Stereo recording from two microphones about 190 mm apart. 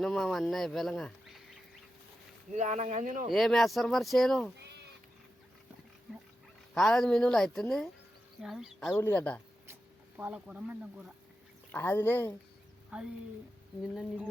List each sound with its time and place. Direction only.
0.0 s speech: centre (ahead or behind)
2.5 s speech: 40° right (ahead or behind)
3.2 s speech: centre (ahead or behind)
6.7 s speech: 5° left (ahead or behind)
10.2 s speech: 10° right (ahead or behind)
11.7 s speech: 10° left (ahead or behind)
12.9 s speech: 5° right (ahead or behind)